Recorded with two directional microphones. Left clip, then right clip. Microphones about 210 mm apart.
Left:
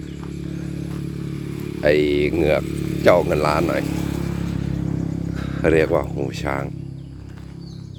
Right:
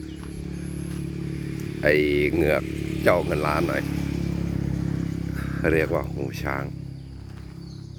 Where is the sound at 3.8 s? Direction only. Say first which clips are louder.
Left 4 dB; 50° left (ahead or behind).